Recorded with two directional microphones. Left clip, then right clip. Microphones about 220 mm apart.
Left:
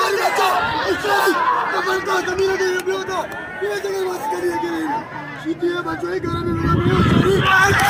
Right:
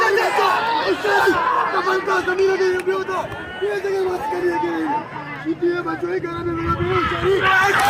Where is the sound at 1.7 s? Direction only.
35° left (ahead or behind).